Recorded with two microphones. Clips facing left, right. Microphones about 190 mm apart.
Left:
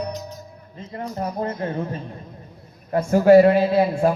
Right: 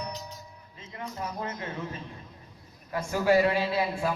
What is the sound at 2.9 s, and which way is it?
Speech, 45° left (ahead or behind).